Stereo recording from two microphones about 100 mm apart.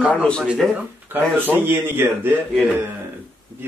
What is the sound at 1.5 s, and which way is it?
Speech, 20° right (ahead or behind).